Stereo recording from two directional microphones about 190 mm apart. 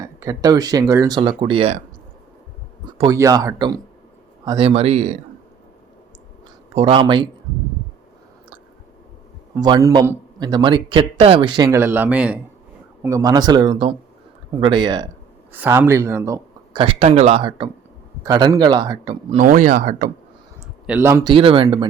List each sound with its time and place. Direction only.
0.0 s speech: 15° right (ahead or behind); by 1.8 s 35° right (ahead or behind)
2.8 s speech: 20° right (ahead or behind); by 5.2 s 35° right (ahead or behind)
6.7 s speech: 30° right (ahead or behind)
9.6 s a man's voice: 20° right (ahead or behind)
16.7 s speech: 30° right (ahead or behind)
19.4 s speech: 45° right (ahead or behind)
20.8 s a man's voice: 10° right (ahead or behind)
21.3 s speech: 30° right (ahead or behind)